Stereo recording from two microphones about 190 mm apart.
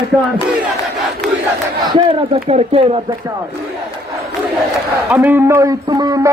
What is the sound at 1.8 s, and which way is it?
Speech, 25° right (ahead or behind).